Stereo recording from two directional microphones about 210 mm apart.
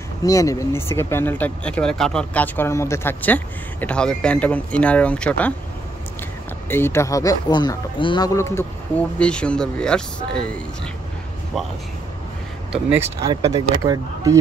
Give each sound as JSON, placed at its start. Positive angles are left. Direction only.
{"t": 0.2, "sound": "speech", "side_deg": 15}
{"t": 6.7, "sound": "speech", "side_deg": 10}
{"t": 12.7, "sound": "speech", "side_deg": -10}